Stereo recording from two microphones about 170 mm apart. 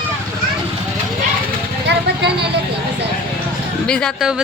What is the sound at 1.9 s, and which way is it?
Speech, 75° right (ahead or behind).